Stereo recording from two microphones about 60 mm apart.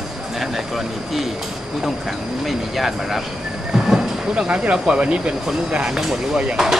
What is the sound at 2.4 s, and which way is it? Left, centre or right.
Speech, centre.